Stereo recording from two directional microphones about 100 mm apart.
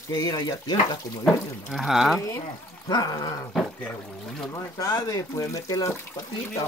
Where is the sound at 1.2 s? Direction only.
Centre (ahead or behind).